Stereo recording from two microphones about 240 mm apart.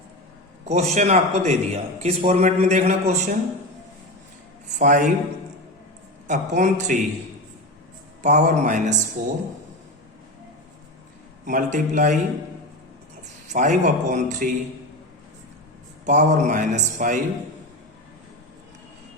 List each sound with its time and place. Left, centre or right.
0.6 s a man's voice: right
4.8 s a man's voice: right
6.2 s a man's voice: right
8.2 s a man's voice: right
11.4 s a man's voice: right
13.5 s a man's voice: right
16.0 s a man's voice: right